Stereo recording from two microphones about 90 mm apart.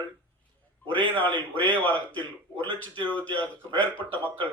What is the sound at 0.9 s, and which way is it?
Speech, 20° left (ahead or behind).